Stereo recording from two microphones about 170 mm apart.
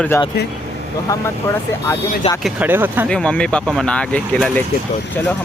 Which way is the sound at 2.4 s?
5° right (ahead or behind).